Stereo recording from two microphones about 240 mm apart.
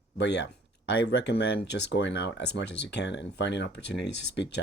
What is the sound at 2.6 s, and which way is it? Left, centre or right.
Speech, left.